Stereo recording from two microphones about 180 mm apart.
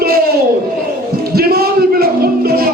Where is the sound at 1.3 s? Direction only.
60° right (ahead or behind).